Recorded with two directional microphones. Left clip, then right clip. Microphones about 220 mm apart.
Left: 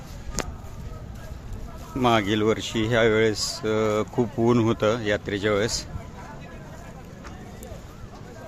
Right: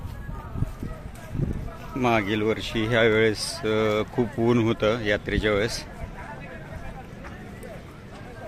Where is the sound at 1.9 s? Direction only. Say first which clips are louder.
Left 2 dB; 5° left (ahead or behind).